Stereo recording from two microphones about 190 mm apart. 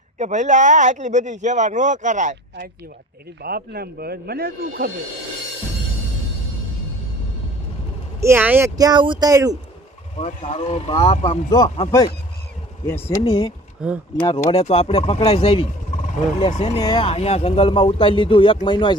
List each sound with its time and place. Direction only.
0.2 s speech: 40° right (ahead or behind)
3.4 s a man's voice: 55° right (ahead or behind)
8.2 s speech: 10° right (ahead or behind)
10.2 s speech: 35° left (ahead or behind)
11.3 s speech: 20° left (ahead or behind)
13.2 s speech: 30° left (ahead or behind)
13.8 s speech: 5° right (ahead or behind)
14.2 s speech: 25° left (ahead or behind)
16.8 s speech: 25° left (ahead or behind)